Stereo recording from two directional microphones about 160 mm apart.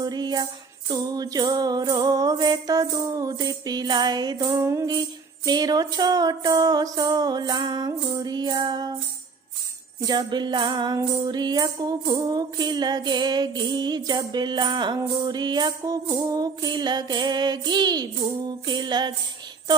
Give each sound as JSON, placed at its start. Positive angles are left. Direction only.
{"t": 0.0, "sound": "tambourine", "side_deg": -25}
{"t": 0.9, "sound": "music", "side_deg": -25}
{"t": 10.1, "sound": "music", "side_deg": -25}